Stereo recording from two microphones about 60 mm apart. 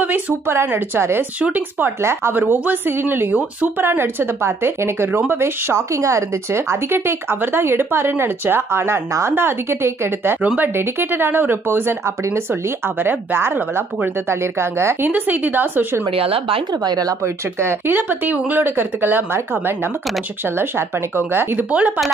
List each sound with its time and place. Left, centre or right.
0.5 s a woman's voice: right
1.4 s a woman's voice: right
10.4 s speech: right
11.0 s speech: right
13.0 s a woman's voice: right
15.0 s speech: right
17.6 s speech: right
21.2 s speech: right
21.7 s speech: right